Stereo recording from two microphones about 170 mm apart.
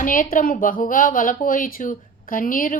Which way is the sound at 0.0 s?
55° left (ahead or behind).